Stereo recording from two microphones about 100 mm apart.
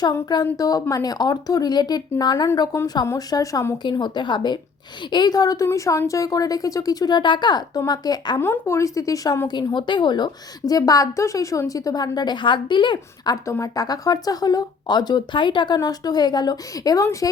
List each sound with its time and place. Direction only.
0.0 s a woman's voice: 45° left (ahead or behind)
3.8 s a woman's voice: 50° left (ahead or behind)
8.4 s speech: 25° left (ahead or behind)
9.5 s a woman's voice: 50° left (ahead or behind)
13.3 s speech: 35° left (ahead or behind)